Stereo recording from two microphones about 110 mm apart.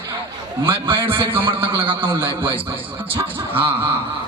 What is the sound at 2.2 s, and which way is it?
Speech, 20° right (ahead or behind).